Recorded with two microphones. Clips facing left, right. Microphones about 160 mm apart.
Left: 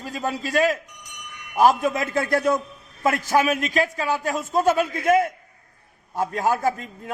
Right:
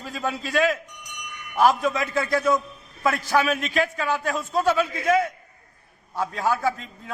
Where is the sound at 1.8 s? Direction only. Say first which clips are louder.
Left 1 dB; 50° left (ahead or behind).